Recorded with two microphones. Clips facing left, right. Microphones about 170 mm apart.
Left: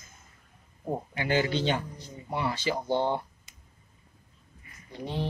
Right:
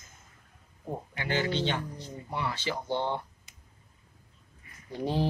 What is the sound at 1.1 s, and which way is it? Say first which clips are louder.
Speech: left 3 dB; 15° left (ahead or behind).